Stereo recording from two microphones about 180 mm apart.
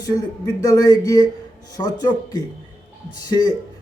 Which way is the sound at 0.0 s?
20° left (ahead or behind).